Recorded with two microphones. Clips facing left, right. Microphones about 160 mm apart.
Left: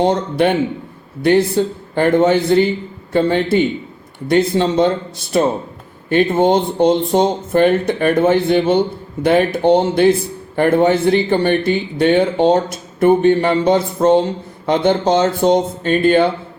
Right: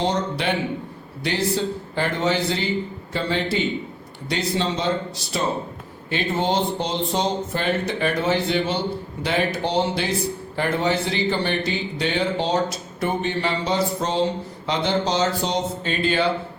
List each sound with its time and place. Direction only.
0.0 s a man's voice: 55° left (ahead or behind)